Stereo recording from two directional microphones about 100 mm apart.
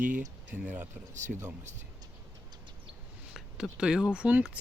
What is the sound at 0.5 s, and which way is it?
Speech, 15° right (ahead or behind).